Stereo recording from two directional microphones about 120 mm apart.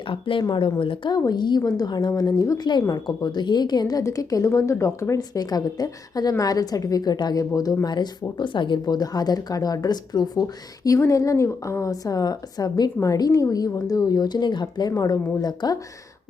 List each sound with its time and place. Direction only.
0.1 s speech: 45° left (ahead or behind)
1.1 s a woman's voice: 35° left (ahead or behind)